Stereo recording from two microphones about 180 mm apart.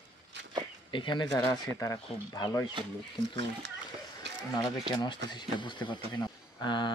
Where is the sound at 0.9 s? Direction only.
25° left (ahead or behind).